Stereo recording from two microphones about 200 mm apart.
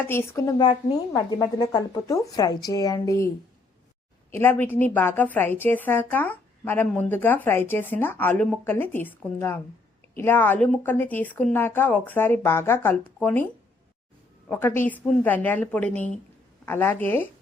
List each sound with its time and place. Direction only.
0.1 s a woman's voice: 15° left (ahead or behind)
4.3 s a woman's voice: 10° left (ahead or behind)
14.4 s a woman's voice: 10° left (ahead or behind)